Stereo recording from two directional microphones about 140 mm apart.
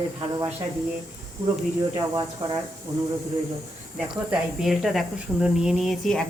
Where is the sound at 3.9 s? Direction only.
Centre (ahead or behind).